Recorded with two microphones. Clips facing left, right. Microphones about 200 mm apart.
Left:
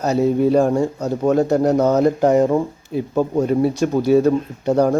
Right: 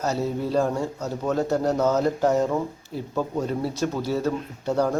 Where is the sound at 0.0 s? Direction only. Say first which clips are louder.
Left 9 dB; 15° left (ahead or behind).